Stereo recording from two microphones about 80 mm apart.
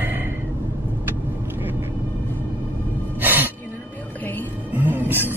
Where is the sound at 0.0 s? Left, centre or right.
Right.